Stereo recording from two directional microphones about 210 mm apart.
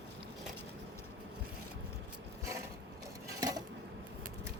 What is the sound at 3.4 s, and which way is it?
Dishes, 15° right (ahead or behind).